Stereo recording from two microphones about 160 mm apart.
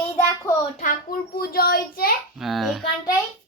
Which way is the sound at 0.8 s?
65° left (ahead or behind).